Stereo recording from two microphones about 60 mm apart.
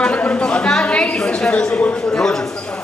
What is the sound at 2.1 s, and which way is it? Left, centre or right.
Speech, centre.